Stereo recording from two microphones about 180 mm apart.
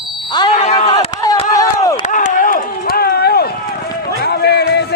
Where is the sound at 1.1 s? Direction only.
20° left (ahead or behind).